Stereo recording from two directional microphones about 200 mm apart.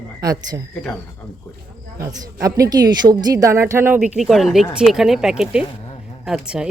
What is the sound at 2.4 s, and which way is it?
A woman's voice, 20° right (ahead or behind).